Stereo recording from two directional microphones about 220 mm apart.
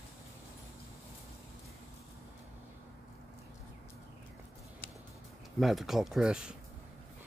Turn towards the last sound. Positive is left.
turn(degrees=-5)  # may be behind; listen again after turning